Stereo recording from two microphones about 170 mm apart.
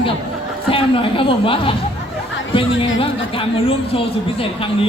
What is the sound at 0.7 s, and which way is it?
Speech, 30° left (ahead or behind).